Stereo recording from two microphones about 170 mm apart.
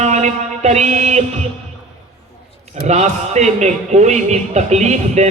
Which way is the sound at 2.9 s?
40° right (ahead or behind).